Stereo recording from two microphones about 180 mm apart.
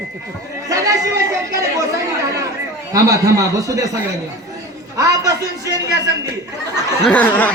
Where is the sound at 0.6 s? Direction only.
20° right (ahead or behind).